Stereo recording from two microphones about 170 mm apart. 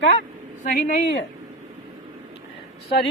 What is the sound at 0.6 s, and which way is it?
Speech, 50° left (ahead or behind).